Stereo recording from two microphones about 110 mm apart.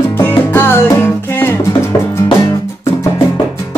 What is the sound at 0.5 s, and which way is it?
Music, 20° left (ahead or behind).